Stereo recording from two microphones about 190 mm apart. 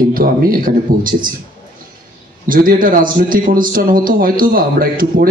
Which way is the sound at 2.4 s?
45° right (ahead or behind).